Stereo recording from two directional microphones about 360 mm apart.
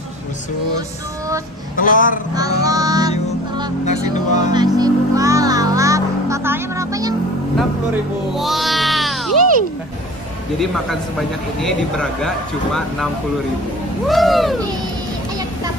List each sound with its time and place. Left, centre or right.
1.8 s speech: left
2.3 s child singing: centre
3.8 s speech: centre
4.6 s music: centre
8.4 s music: centre
10.6 s a man's voice: centre